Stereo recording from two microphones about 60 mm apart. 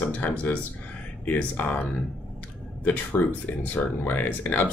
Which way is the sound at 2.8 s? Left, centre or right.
Left.